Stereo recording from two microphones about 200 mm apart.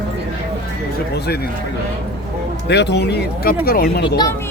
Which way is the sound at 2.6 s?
55° left (ahead or behind).